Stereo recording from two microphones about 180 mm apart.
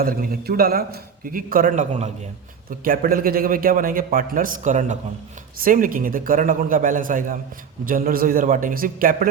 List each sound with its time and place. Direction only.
0.0 s a man's voice: 55° right (ahead or behind)
2.6 s a man's voice: 55° right (ahead or behind)